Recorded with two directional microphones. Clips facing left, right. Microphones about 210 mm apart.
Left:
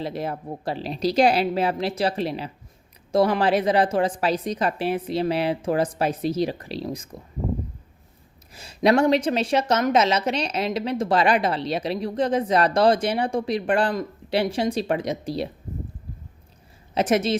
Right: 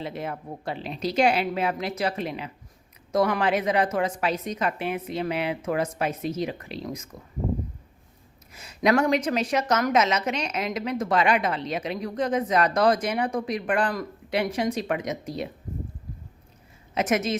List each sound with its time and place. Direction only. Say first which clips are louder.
0.0 s a woman's voice: left 4 dB; 35° left (ahead or behind)
8.5 s a woman's voice: left 3 dB; 30° left (ahead or behind)
16.9 s a woman's voice: left 3 dB; 30° left (ahead or behind)